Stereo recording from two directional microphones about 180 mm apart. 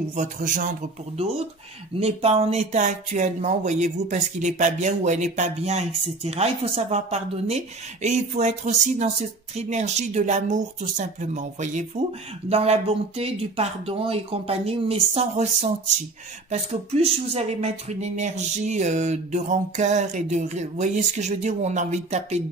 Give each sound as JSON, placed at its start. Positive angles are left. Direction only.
{"t": 0.1, "sound": "a man's voice", "side_deg": -45}